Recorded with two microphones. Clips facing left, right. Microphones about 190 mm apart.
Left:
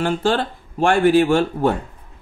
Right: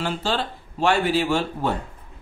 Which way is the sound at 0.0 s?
50° left (ahead or behind).